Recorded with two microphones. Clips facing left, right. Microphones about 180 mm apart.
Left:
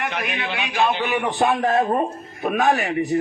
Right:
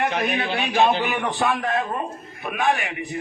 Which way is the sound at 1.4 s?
35° left (ahead or behind).